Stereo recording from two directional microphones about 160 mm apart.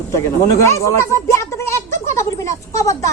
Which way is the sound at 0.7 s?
20° left (ahead or behind).